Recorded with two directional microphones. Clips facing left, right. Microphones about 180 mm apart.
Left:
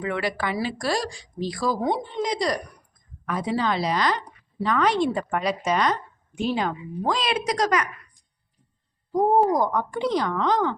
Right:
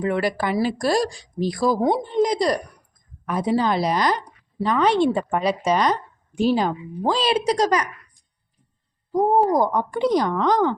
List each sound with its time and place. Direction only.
0.0 s speech: 40° right (ahead or behind)
4.6 s a woman's voice: 30° right (ahead or behind)
9.5 s a woman's voice: 35° right (ahead or behind)